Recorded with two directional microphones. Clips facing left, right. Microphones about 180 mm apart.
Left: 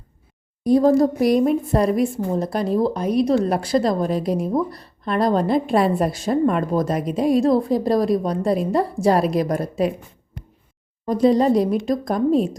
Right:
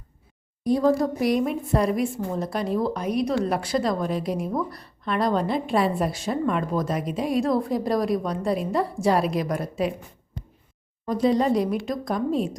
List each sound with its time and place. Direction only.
0.6 s a woman's voice: 40° left (ahead or behind)
11.0 s a woman's voice: 35° left (ahead or behind)